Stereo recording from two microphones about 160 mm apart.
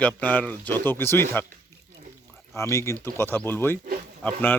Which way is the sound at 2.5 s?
20° left (ahead or behind).